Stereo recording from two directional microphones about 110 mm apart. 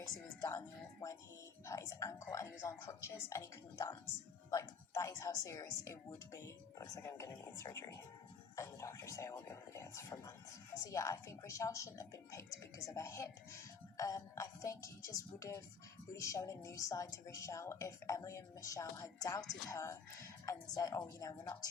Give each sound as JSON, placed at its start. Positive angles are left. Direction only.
{"t": 1.6, "sound": "a woman's voice", "side_deg": 30}